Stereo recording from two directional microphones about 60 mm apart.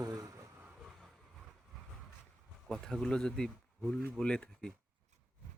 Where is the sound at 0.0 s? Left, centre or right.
Right.